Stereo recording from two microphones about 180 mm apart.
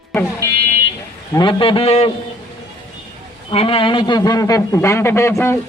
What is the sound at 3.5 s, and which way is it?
A man's voice, 30° left (ahead or behind).